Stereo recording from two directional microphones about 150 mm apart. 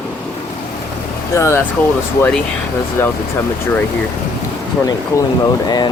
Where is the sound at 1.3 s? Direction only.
15° left (ahead or behind).